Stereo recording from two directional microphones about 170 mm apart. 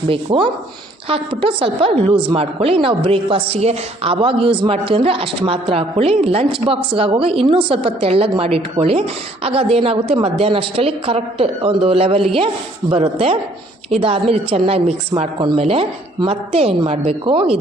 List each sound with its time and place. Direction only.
0.1 s a woman's voice: 30° right (ahead or behind)